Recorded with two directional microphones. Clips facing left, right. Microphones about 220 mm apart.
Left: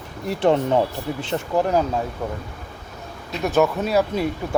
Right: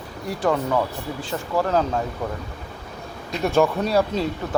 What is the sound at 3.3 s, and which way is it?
Speech, centre (ahead or behind).